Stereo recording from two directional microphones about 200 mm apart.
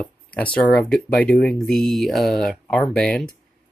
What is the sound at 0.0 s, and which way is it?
Speech, 5° left (ahead or behind).